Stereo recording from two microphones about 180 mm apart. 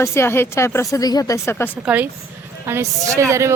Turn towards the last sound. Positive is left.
turn(degrees=-15)  # may be behind; listen again after turning